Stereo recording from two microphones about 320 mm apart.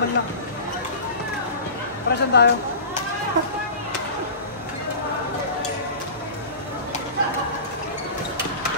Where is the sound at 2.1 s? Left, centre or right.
Left.